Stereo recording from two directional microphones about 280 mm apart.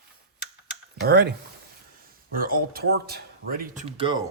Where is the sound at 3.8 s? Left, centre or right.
Centre.